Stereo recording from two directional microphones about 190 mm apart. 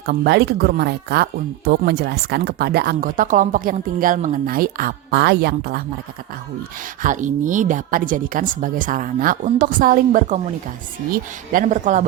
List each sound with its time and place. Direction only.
0.0 s speech: 60° right (ahead or behind)
7.0 s speech: 40° right (ahead or behind)